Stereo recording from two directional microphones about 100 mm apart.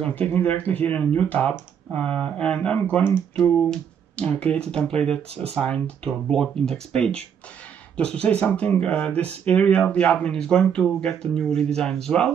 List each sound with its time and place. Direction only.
0.0 s speech: 15° left (ahead or behind)
6.3 s speech: 5° left (ahead or behind)